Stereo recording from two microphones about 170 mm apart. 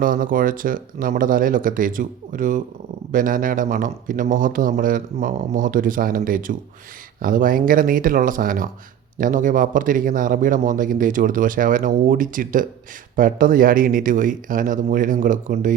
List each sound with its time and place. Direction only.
0.0 s speech: 55° right (ahead or behind)